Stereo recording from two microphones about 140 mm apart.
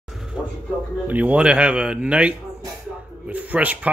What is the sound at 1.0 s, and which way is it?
Speech, 10° right (ahead or behind).